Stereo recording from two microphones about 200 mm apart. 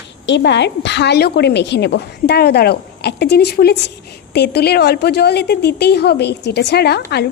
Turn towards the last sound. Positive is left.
turn(degrees=55)  # may be behind; listen again after turning